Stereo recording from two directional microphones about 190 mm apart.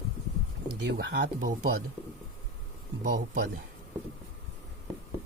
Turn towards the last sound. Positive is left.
turn(degrees=-60)  # may be behind; listen again after turning